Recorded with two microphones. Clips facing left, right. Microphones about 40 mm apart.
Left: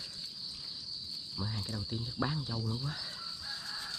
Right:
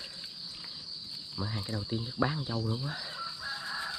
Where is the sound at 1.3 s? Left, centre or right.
Right.